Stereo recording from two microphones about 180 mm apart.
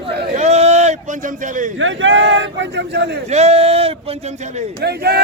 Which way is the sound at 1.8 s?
90° right.